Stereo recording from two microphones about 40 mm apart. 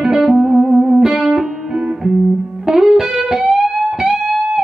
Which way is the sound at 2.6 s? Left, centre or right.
Centre.